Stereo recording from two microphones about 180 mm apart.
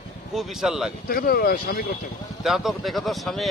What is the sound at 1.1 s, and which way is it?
Speech, 60° left (ahead or behind).